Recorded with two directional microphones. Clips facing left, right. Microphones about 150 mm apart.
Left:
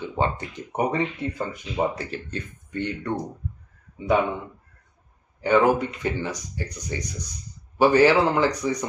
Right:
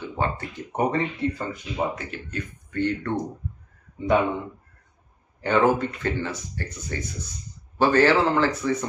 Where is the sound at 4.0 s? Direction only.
Centre (ahead or behind).